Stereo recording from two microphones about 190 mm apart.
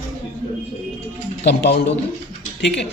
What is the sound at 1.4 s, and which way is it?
Speech, 60° left (ahead or behind).